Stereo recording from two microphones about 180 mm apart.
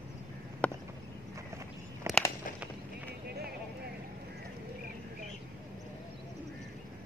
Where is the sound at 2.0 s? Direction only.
15° right (ahead or behind).